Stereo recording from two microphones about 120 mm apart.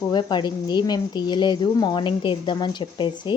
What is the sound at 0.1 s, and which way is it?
Speech, 40° left (ahead or behind).